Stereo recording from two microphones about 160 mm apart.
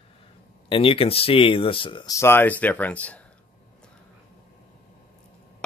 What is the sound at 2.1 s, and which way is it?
Speech, 15° left (ahead or behind).